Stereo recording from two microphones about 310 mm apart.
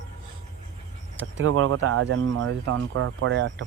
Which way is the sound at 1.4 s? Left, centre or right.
Right.